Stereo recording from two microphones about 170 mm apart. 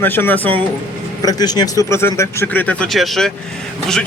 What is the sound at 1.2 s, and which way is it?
Speech, 20° left (ahead or behind).